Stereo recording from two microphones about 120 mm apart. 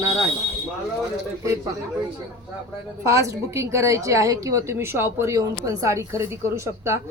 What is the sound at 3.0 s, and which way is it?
A woman's voice, 25° right (ahead or behind).